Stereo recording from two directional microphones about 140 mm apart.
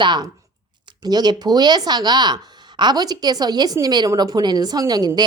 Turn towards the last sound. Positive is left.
turn(degrees=-30)  # may be behind; listen again after turning